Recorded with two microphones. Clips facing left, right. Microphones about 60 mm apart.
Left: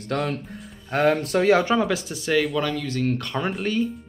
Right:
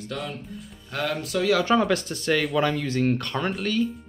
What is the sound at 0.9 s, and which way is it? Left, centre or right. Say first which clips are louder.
Speech: left 7 dB; left.